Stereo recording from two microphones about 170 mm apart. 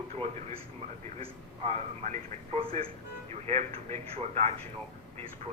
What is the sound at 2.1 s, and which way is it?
Speech, 40° right (ahead or behind).